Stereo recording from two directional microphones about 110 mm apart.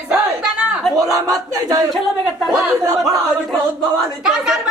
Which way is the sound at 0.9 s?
30° right (ahead or behind).